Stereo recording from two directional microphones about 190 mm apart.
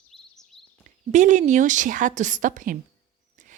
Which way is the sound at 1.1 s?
40° right (ahead or behind).